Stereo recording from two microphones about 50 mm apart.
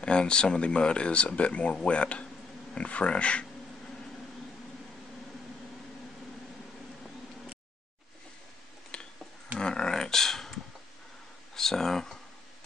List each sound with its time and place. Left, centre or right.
0.0 s speech: centre
8.9 s a sound: centre
11.5 s speech: centre